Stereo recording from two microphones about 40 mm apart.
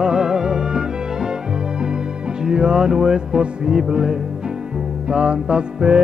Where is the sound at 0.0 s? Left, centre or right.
Centre.